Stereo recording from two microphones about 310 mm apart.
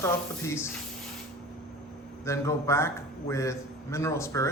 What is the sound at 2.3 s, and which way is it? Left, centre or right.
A man's voice, centre.